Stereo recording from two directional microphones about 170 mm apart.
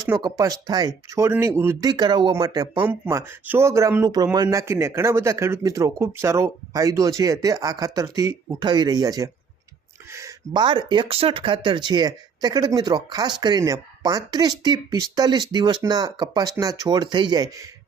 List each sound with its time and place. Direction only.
0.0 s speech: 20° right (ahead or behind)
2.7 s speech: 10° right (ahead or behind)